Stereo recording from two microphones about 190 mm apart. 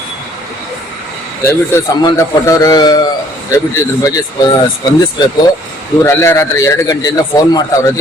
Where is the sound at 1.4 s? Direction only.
15° left (ahead or behind).